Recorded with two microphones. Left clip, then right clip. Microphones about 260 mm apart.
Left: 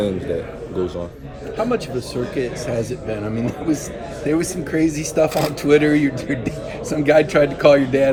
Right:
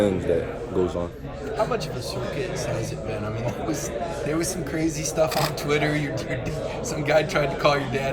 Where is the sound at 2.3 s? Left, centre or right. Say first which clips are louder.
Left 7 dB; centre.